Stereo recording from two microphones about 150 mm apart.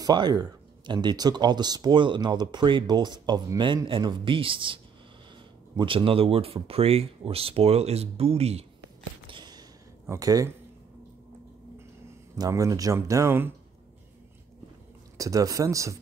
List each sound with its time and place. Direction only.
0.0 s speech: 30° right (ahead or behind)
5.8 s speech: 35° right (ahead or behind)
9.3 s a sound: 30° right (ahead or behind)
12.4 s speech: 25° right (ahead or behind)
15.1 s speech: 20° right (ahead or behind)